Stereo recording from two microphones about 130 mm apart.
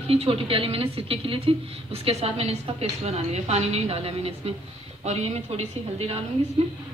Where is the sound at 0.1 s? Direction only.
50° right (ahead or behind).